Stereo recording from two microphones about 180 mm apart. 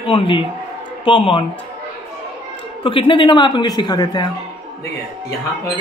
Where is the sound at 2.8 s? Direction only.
30° left (ahead or behind).